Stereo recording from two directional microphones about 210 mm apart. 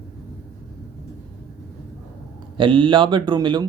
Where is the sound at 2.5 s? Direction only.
25° right (ahead or behind).